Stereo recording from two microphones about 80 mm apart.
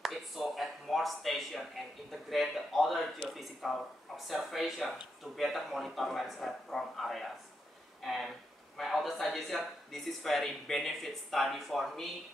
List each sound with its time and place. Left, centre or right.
0.0 s speech: centre